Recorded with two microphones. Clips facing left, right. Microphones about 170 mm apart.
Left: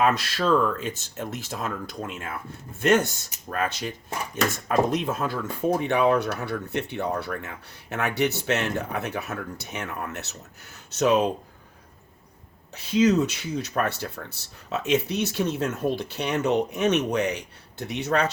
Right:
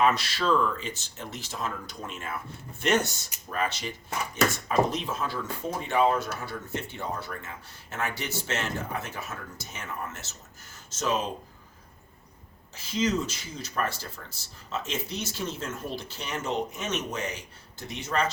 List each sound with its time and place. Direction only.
0.0 s speech: 50° left (ahead or behind)
5.8 s speech: 65° left (ahead or behind)
12.7 s speech: 65° left (ahead or behind)